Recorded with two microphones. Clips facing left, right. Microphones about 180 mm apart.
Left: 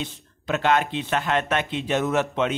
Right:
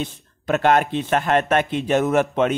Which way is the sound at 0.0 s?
50° right (ahead or behind).